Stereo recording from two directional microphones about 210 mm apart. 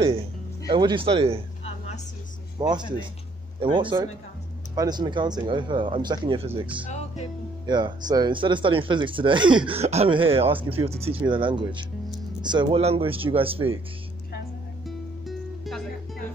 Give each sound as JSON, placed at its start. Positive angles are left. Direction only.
{"t": 0.7, "sound": "speech", "side_deg": -20}
{"t": 2.6, "sound": "speech", "side_deg": -20}
{"t": 14.9, "sound": "music", "side_deg": 0}